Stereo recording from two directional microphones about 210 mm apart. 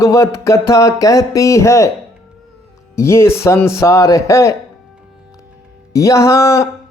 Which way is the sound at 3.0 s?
15° left (ahead or behind).